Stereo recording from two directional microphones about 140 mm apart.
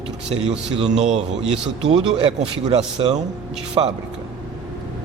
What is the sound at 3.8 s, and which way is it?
Speech, 35° right (ahead or behind).